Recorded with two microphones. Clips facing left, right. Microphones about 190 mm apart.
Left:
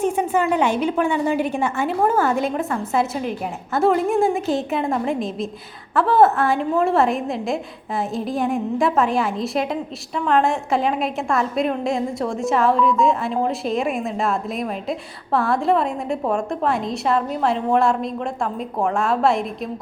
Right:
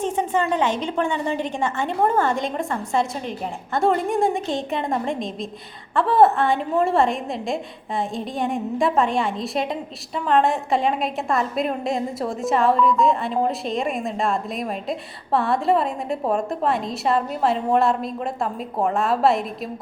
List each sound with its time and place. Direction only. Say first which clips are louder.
0.0 s a woman's voice: left 3 dB; 10° left (ahead or behind)